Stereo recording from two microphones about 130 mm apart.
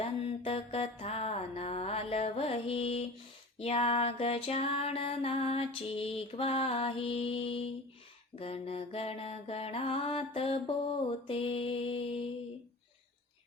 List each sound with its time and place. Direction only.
0.0 s mantra: 50° left (ahead or behind)
3.6 s music: 50° left (ahead or behind)